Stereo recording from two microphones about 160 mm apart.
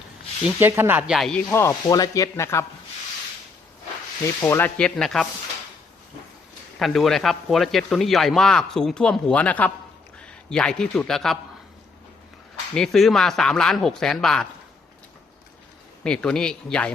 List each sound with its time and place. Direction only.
0.4 s speech: 15° right (ahead or behind)
1.5 s speech: 20° left (ahead or behind)
4.4 s speech: 15° left (ahead or behind)
4.8 s speech: 5° left (ahead or behind)
6.7 s a man's voice: centre (ahead or behind)
12.7 s speech: 5° left (ahead or behind)
16.0 s speech: 5° left (ahead or behind)